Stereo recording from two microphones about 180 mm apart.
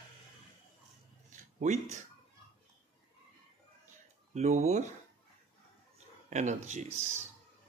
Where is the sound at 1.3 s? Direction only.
40° right (ahead or behind).